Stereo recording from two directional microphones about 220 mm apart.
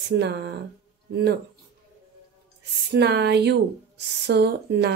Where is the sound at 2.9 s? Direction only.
50° right (ahead or behind).